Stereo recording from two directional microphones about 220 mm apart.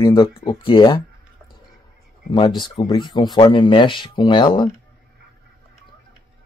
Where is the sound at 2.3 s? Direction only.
20° left (ahead or behind).